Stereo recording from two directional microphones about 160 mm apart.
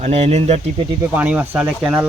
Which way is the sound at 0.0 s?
45° right (ahead or behind).